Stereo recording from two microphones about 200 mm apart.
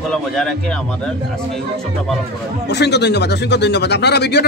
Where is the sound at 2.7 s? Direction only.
55° left (ahead or behind).